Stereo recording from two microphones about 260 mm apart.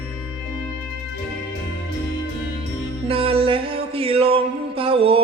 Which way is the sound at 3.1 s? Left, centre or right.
Right.